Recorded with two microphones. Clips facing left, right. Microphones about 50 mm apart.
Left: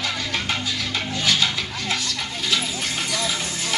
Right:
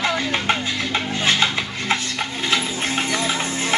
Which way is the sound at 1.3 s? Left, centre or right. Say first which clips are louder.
Right 2 dB; right.